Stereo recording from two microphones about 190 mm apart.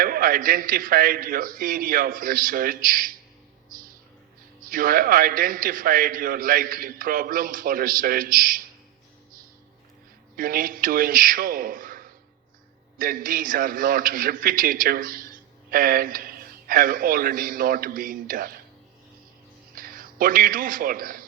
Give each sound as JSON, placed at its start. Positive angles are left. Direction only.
{"t": 0.0, "sound": "a man's voice", "side_deg": -50}
{"t": 4.6, "sound": "a man's voice", "side_deg": -45}
{"t": 10.3, "sound": "a man's voice", "side_deg": -50}
{"t": 19.7, "sound": "a man's voice", "side_deg": -50}